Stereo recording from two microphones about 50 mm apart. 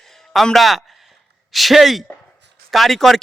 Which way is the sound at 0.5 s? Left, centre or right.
Centre.